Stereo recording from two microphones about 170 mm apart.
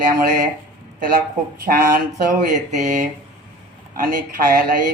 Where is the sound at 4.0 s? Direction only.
55° right (ahead or behind).